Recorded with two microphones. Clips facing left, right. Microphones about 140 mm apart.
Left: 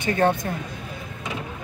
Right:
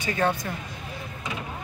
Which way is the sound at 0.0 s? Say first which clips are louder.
Left 5 dB; 50° left (ahead or behind).